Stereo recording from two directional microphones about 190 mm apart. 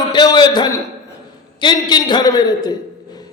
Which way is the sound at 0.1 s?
20° left (ahead or behind).